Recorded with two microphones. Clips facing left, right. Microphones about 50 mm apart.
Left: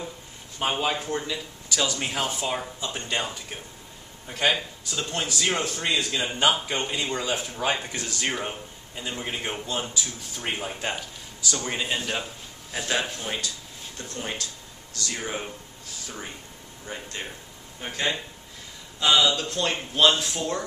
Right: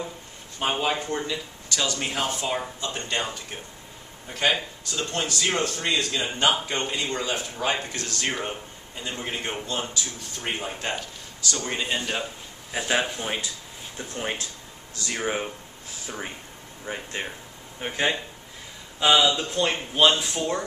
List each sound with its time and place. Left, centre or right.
0.6 s speech: centre
12.7 s speech: centre
16.8 s speech: centre